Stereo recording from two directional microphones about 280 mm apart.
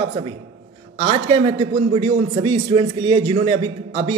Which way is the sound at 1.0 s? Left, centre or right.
Right.